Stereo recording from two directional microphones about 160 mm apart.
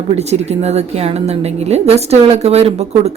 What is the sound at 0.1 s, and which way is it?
A woman's voice, 40° right (ahead or behind).